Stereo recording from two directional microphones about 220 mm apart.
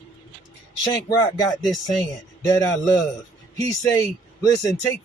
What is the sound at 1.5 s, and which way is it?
Speech, 20° left (ahead or behind).